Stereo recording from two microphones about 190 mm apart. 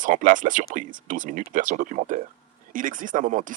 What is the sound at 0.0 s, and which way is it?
Speech, 45° right (ahead or behind).